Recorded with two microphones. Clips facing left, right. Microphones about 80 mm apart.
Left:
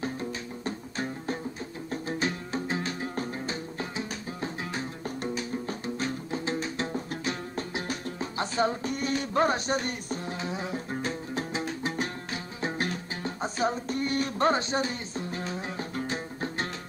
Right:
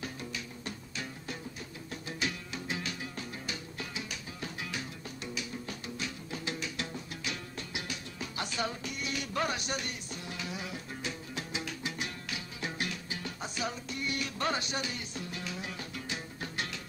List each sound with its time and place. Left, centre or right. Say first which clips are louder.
0.0 s music: left 7 dB; left